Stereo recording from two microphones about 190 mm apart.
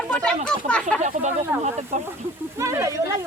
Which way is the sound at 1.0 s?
40° right (ahead or behind).